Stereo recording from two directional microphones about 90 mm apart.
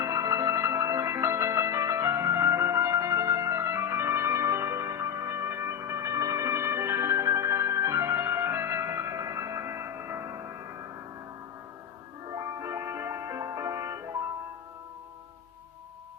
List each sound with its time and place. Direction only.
0.0 s music: 35° right (ahead or behind)
12.3 s music: 35° right (ahead or behind)